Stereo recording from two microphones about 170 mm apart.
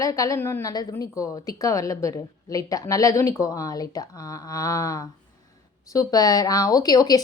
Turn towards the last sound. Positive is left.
turn(degrees=25)  # may be behind; listen again after turning